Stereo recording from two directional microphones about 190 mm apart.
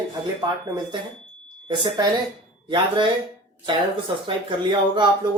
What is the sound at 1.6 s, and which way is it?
Speech, 25° right (ahead or behind).